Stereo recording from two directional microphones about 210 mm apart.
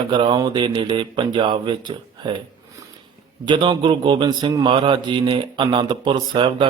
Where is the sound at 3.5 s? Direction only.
20° right (ahead or behind).